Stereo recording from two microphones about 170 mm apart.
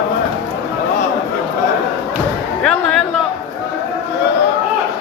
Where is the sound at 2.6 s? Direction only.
5° left (ahead or behind).